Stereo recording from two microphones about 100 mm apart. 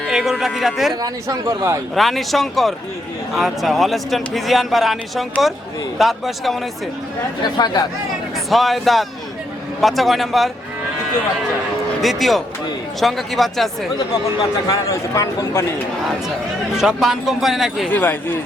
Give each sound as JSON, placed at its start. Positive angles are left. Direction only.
{"t": 0.1, "sound": "speech", "side_deg": -5}
{"t": 1.0, "sound": "speech", "side_deg": -30}
{"t": 2.0, "sound": "speech", "side_deg": 0}
{"t": 7.4, "sound": "speech", "side_deg": 45}
{"t": 8.4, "sound": "speech", "side_deg": 0}
{"t": 11.9, "sound": "speech", "side_deg": 0}
{"t": 14.7, "sound": "a man's voice", "side_deg": 35}
{"t": 16.7, "sound": "speech", "side_deg": -5}
{"t": 17.8, "sound": "speech", "side_deg": 20}